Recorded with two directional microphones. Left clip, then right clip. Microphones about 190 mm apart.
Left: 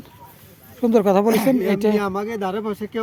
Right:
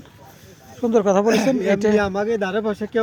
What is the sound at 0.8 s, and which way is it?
Speech, 40° left (ahead or behind).